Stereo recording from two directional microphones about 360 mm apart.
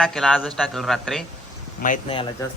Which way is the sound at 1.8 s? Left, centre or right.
Left.